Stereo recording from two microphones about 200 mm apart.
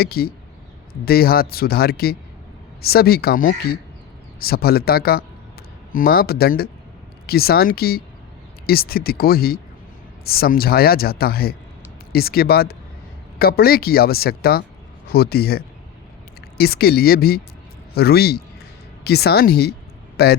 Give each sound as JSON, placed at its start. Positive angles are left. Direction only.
{"t": 0.0, "sound": "speech", "side_deg": 50}